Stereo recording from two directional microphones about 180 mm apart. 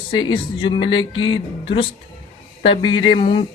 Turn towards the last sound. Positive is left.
turn(degrees=30)  # may be behind; listen again after turning